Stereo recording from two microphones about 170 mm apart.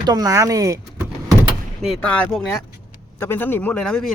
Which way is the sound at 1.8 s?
5° left (ahead or behind).